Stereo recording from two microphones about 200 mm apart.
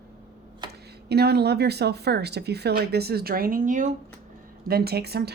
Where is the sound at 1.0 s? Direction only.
55° right (ahead or behind).